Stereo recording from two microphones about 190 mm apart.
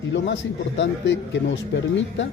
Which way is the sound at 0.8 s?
70° left (ahead or behind).